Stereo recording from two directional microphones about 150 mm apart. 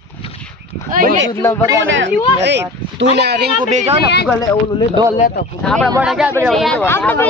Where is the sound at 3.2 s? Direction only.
90° right.